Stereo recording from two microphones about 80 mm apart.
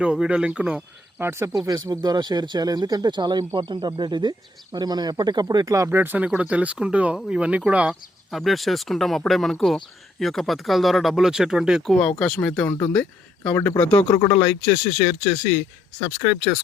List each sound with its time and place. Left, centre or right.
0.0 s speech: centre
1.2 s speech: right
1.5 s speech: right
5.9 s speech: right
8.3 s speech: centre
12.0 s speech: centre
13.6 s speech: left
13.9 s speech: left
14.6 s speech: centre